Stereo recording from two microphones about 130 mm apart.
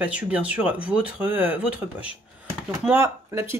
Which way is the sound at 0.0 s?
10° right (ahead or behind).